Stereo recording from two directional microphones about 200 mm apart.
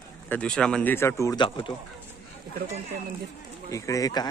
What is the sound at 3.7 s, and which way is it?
Speech, 15° left (ahead or behind).